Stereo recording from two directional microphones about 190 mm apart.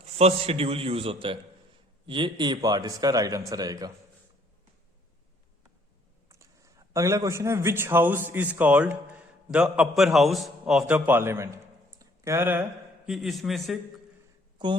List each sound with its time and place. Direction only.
0.0 s a man's voice: 30° right (ahead or behind)
6.2 s a man's voice: 15° right (ahead or behind)
13.1 s a man's voice: centre (ahead or behind)